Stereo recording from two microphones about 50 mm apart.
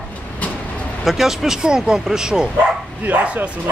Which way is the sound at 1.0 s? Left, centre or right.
Centre.